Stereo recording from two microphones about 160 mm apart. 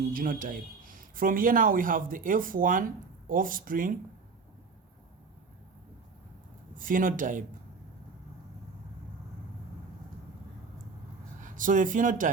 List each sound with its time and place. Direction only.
0.1 s a man's voice: 60° right (ahead or behind)
6.7 s a man's voice: 60° right (ahead or behind)
11.3 s speech: 55° right (ahead or behind)